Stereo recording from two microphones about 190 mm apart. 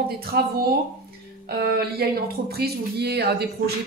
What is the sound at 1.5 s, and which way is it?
Speech, 55° right (ahead or behind).